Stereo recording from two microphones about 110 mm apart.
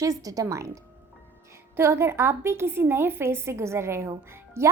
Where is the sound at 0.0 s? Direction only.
30° right (ahead or behind).